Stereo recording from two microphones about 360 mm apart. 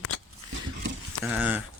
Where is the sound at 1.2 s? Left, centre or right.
Centre.